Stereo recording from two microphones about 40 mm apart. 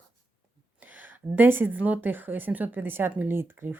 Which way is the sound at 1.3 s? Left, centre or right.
Right.